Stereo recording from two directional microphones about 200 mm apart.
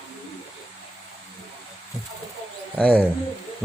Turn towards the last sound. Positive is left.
turn(degrees=10)  # may be behind; listen again after turning